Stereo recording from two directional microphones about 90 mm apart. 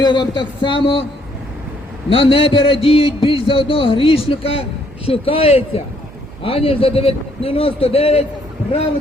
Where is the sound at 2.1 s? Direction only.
75° left (ahead or behind).